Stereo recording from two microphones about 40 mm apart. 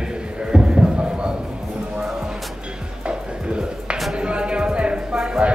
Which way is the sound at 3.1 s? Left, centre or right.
Right.